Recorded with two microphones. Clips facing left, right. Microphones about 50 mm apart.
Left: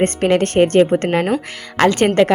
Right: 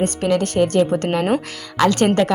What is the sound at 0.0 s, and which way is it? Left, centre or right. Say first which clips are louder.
A woman's voice: left 4 dB; left.